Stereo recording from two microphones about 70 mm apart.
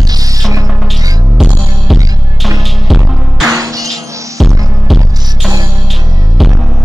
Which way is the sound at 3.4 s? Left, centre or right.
Right.